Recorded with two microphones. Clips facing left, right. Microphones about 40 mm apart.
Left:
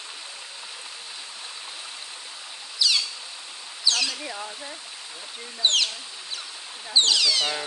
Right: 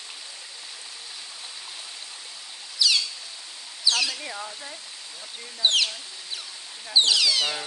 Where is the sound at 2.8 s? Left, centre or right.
Centre.